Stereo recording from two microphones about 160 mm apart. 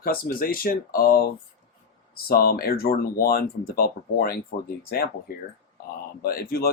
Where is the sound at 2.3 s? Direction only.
70° left (ahead or behind).